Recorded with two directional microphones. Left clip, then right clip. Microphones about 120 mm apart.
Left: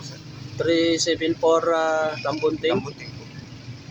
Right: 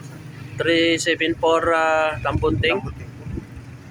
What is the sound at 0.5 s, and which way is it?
Speech, 25° left (ahead or behind).